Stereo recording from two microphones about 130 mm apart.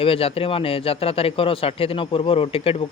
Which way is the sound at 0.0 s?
45° left (ahead or behind).